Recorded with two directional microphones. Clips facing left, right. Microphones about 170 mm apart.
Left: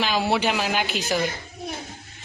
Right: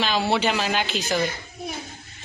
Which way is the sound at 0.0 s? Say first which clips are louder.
Even; 10° left (ahead or behind).